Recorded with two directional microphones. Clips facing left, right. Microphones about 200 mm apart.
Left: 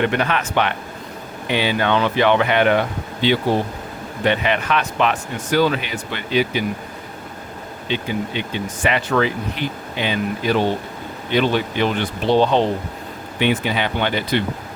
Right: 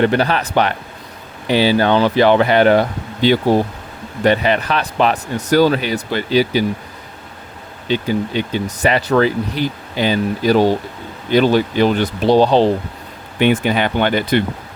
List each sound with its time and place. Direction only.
0.0 s speech: 35° right (ahead or behind)
7.9 s speech: 40° right (ahead or behind)
13.4 s speech: 50° right (ahead or behind)